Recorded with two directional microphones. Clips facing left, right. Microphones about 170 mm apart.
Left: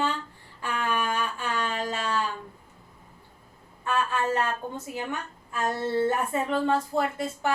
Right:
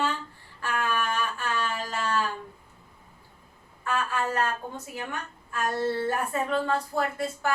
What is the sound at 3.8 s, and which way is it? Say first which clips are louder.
Speech: left 2 dB; 25° left (ahead or behind).